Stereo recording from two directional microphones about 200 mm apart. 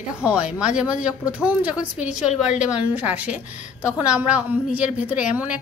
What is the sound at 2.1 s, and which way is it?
Speech, 35° left (ahead or behind).